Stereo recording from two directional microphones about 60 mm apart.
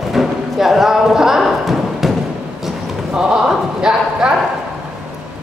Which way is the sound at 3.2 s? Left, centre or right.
Centre.